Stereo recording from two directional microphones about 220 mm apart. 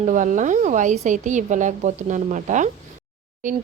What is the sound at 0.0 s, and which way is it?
Speech, 35° right (ahead or behind).